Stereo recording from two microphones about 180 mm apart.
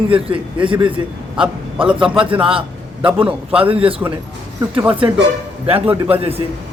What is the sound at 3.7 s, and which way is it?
Speech, 30° right (ahead or behind).